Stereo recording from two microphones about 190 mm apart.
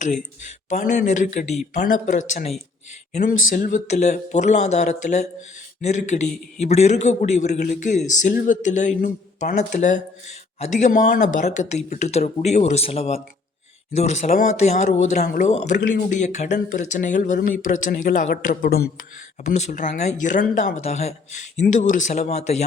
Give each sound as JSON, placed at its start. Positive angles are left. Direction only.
{"t": 0.0, "sound": "speech", "side_deg": 40}